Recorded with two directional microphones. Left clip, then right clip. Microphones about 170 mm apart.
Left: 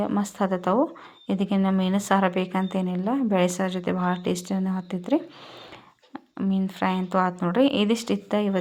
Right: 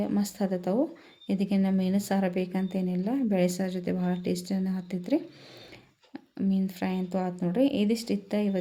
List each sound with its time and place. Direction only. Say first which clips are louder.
0.0 s a woman's voice: left 5 dB; 5° right (ahead or behind)
6.1 s a woman's voice: left 3 dB; 15° right (ahead or behind); by 8.5 s centre (ahead or behind)